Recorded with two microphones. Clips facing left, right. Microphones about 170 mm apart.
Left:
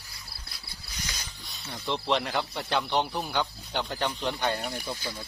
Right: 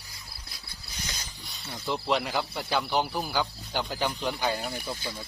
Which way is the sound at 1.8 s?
5° right (ahead or behind).